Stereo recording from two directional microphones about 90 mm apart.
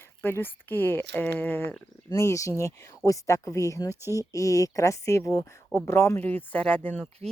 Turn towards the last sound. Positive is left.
turn(degrees=15)  # may be behind; listen again after turning